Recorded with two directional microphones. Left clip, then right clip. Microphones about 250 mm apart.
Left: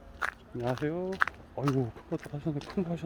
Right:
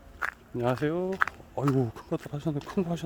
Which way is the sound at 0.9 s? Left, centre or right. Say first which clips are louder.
Right 2 dB; right.